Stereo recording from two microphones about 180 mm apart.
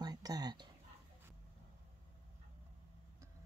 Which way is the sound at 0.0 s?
20° right (ahead or behind).